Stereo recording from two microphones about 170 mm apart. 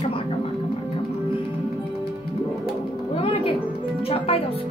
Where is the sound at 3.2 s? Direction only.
35° left (ahead or behind).